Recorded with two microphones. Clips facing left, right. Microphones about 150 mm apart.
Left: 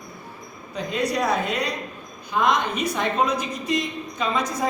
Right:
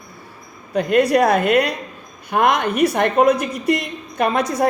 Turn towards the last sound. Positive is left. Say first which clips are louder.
# right 6 dB
turn(degrees=-65)  # may be behind; listen again after turning